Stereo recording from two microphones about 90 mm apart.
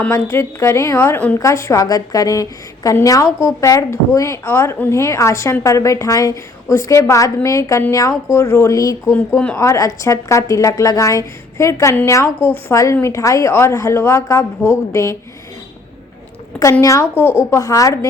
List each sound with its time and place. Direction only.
0.1 s a woman's voice: 30° left (ahead or behind)
16.8 s a woman's voice: 35° left (ahead or behind)
17.2 s a woman's voice: 25° left (ahead or behind)